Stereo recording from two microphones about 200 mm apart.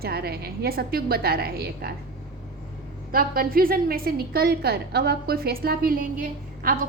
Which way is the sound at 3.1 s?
45° right (ahead or behind).